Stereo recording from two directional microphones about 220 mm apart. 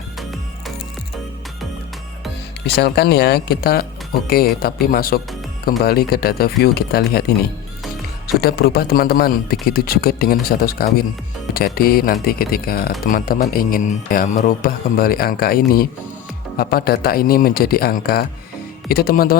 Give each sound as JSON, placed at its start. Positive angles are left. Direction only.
{"t": 2.8, "sound": "speech", "side_deg": 45}
{"t": 8.4, "sound": "speech", "side_deg": 45}
{"t": 11.5, "sound": "a man's voice", "side_deg": 45}